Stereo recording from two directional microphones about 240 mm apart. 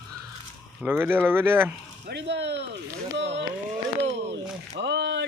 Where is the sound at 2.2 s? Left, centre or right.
Right.